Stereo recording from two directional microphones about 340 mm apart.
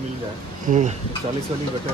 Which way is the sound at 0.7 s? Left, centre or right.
Right.